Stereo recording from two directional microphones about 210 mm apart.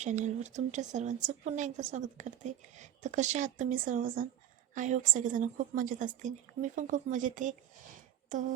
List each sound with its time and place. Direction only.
0.0 s a woman's voice: 35° right (ahead or behind)